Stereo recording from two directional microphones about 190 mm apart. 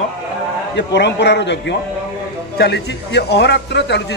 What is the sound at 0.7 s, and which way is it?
A man's voice, 65° left (ahead or behind).